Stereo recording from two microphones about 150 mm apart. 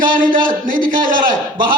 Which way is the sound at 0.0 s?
65° right (ahead or behind).